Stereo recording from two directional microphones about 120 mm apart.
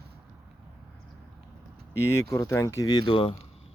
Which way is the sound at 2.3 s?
25° left (ahead or behind).